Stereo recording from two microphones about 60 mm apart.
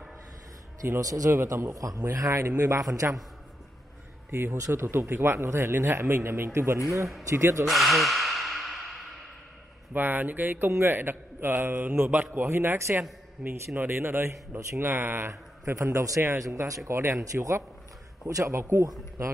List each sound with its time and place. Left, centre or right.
1.0 s a man's voice: right
1.5 s a man's voice: right
2.1 s a man's voice: right
4.3 s a man's voice: right
7.6 s sigh: centre
9.9 s a man's voice: right
12.4 s a man's voice: right
15.6 s a man's voice: right
16.9 s speech: right
17.2 s a man's voice: right